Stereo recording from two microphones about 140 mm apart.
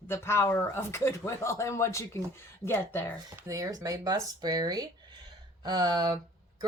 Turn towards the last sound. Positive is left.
turn(degrees=-30)  # may be behind; listen again after turning